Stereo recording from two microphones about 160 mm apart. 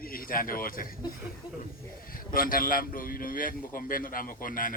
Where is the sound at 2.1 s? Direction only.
60° left (ahead or behind).